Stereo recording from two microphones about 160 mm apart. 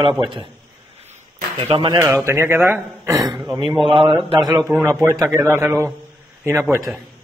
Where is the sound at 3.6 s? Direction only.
30° right (ahead or behind).